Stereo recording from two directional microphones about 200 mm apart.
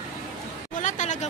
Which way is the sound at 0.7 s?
40° left (ahead or behind).